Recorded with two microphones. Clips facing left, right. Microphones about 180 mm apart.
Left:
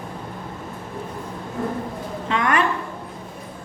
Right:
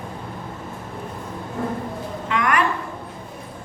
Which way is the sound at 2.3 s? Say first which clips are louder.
Even; 25° left (ahead or behind).